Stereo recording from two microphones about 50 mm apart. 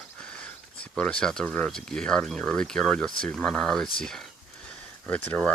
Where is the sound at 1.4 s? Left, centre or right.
Left.